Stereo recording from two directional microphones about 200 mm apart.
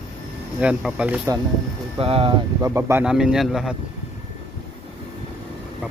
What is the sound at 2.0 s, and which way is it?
Speech, 30° right (ahead or behind).